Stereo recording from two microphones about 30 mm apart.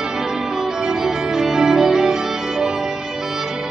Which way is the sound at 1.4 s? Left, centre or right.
Centre.